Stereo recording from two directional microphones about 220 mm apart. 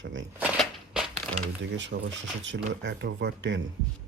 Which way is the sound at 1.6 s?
55° right (ahead or behind).